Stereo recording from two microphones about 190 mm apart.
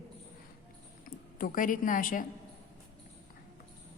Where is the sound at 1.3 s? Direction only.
45° left (ahead or behind).